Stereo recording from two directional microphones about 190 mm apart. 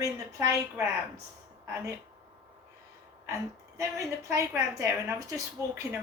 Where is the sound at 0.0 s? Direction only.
15° right (ahead or behind).